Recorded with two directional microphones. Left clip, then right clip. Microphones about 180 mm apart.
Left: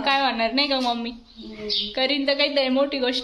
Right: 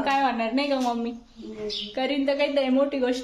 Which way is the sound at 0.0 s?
5° left (ahead or behind).